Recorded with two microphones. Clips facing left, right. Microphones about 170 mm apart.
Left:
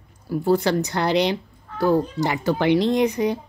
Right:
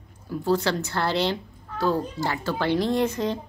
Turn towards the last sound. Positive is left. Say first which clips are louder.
# left 4 dB
turn(degrees=15)  # may be behind; listen again after turning